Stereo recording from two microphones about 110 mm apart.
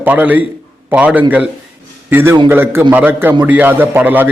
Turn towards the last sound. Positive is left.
turn(degrees=-15)  # may be behind; listen again after turning